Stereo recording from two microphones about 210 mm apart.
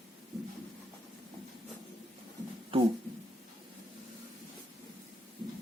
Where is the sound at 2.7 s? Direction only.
25° right (ahead or behind).